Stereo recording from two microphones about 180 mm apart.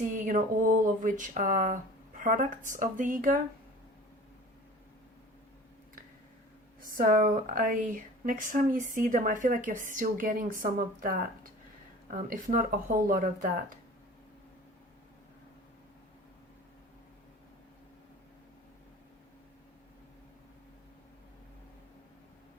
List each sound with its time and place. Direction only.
0.0 s speech: 45° right (ahead or behind)
6.9 s speech: 50° right (ahead or behind)